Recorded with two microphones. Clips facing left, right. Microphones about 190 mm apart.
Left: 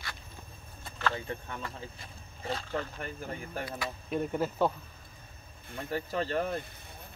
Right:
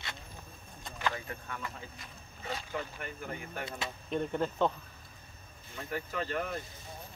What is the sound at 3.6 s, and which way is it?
Speech, 25° right (ahead or behind).